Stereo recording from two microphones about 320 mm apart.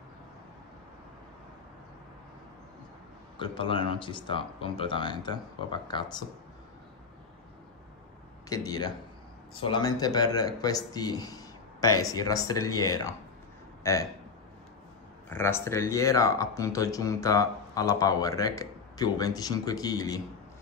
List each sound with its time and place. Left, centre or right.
3.3 s speech: centre
8.5 s speech: centre
15.2 s speech: centre